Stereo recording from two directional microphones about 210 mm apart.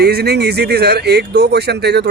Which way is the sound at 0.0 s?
50° right (ahead or behind).